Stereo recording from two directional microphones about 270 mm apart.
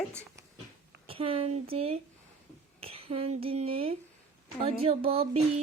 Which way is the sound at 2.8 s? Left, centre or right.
Right.